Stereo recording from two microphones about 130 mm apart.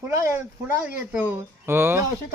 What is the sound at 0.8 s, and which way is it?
Speech, 15° right (ahead or behind).